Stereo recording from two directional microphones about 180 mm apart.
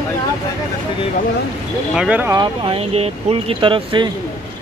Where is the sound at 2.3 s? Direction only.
30° right (ahead or behind).